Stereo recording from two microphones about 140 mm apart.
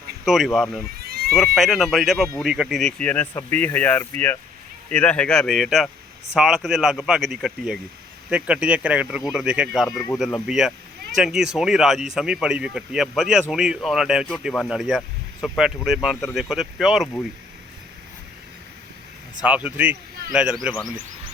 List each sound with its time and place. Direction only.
0.3 s speech: centre (ahead or behind)
1.0 s a sound: 90° right
1.4 s speech: centre (ahead or behind)
19.4 s speech: 10° right (ahead or behind)